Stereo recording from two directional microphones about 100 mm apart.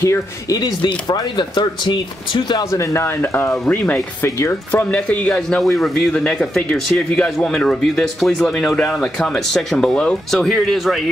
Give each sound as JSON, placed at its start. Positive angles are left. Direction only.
{"t": 0.0, "sound": "speech", "side_deg": 25}
{"t": 0.6, "sound": "speech", "side_deg": 40}
{"t": 2.7, "sound": "speech", "side_deg": 30}
{"t": 3.4, "sound": "speech", "side_deg": 15}
{"t": 4.9, "sound": "speech", "side_deg": 15}